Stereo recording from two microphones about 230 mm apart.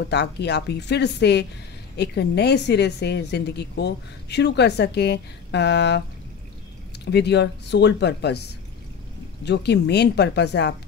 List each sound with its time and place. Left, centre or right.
0.0 s speech: left
7.1 s speech: left
9.4 s speech: left